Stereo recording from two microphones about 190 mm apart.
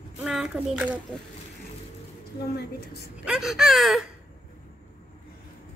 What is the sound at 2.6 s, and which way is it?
Speech, 60° left (ahead or behind).